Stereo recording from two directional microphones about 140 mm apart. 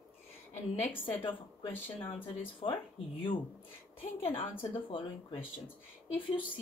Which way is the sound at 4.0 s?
40° left (ahead or behind).